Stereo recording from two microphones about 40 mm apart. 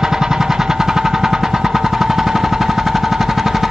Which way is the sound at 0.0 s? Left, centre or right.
Centre.